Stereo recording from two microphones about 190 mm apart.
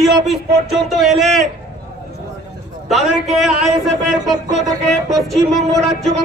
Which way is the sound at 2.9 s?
Centre (ahead or behind).